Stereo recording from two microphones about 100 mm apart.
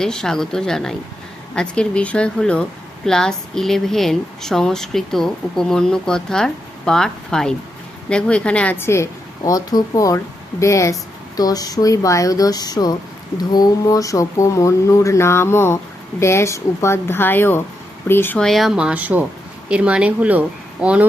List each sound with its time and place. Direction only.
0.0 s a woman's voice: 5° left (ahead or behind)
8.8 s speech: 25° left (ahead or behind)
9.4 s speech: 40° left (ahead or behind); by 18.3 s 20° left (ahead or behind)
18.3 s speech: centre (ahead or behind)